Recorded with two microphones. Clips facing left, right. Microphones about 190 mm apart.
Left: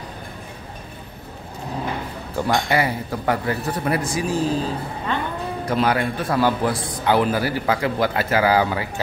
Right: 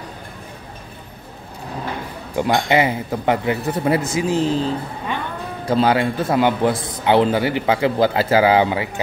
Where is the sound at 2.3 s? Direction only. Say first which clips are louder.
Right 3 dB; 20° right (ahead or behind).